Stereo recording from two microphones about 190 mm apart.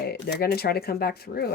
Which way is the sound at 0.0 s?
55° left (ahead or behind).